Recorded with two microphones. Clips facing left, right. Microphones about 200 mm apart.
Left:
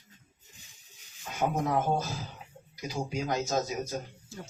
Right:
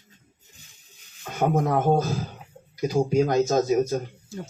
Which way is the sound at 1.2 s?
55° right (ahead or behind).